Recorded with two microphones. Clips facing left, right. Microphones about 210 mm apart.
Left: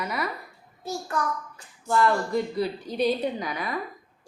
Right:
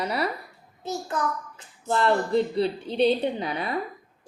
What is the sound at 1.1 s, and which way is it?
A woman's voice, 20° right (ahead or behind).